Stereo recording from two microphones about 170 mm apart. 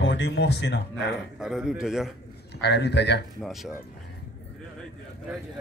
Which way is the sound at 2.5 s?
80° left.